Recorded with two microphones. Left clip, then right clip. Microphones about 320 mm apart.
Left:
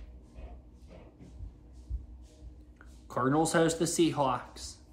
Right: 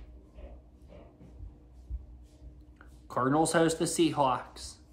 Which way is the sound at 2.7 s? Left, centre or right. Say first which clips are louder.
Right 2 dB; centre.